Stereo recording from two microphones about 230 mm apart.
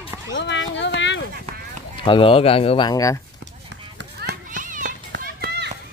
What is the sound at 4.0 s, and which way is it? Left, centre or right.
Children playing, right.